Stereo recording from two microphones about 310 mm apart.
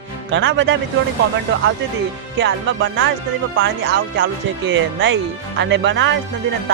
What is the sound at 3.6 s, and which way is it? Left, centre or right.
Speech, right.